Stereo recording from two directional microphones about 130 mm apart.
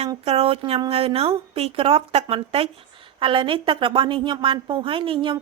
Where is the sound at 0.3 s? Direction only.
50° right (ahead or behind).